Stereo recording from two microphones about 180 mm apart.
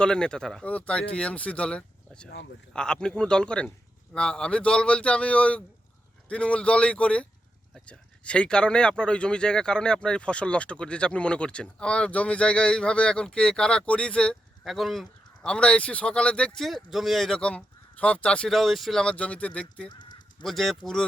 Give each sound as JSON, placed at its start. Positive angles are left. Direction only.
{"t": 0.0, "sound": "a man's voice", "side_deg": 5}
{"t": 19.9, "sound": "honk", "side_deg": 25}
{"t": 20.4, "sound": "speech", "side_deg": 0}